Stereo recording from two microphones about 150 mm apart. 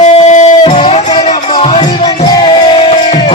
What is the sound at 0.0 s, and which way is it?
Music, 50° left (ahead or behind).